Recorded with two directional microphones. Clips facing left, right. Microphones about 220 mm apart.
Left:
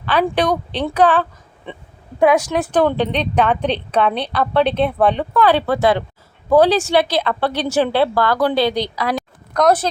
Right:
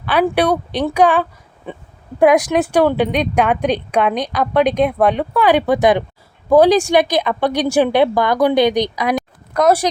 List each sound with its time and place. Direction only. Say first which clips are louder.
0.0 s a woman's voice: right 2 dB; 10° right (ahead or behind)